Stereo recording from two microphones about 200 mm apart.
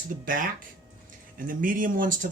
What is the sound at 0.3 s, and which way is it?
Speech, 45° right (ahead or behind).